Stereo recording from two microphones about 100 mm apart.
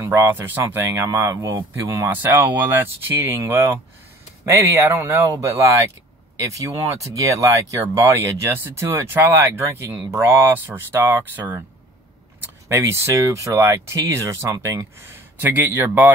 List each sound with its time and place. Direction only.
0.3 s speech: 20° right (ahead or behind)
2.1 s speech: 20° right (ahead or behind)
12.6 s speech: 25° right (ahead or behind)